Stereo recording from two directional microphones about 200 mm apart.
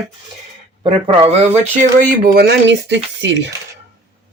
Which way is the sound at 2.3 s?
55° right (ahead or behind).